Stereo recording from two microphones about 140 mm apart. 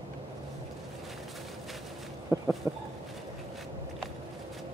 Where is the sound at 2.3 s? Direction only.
25° right (ahead or behind).